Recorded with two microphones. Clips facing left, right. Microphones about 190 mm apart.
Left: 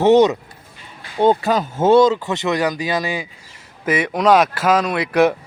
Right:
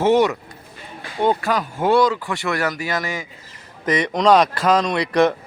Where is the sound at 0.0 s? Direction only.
20° left (ahead or behind).